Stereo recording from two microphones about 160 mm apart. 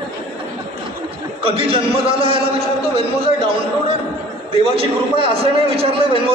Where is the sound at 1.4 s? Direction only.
35° right (ahead or behind).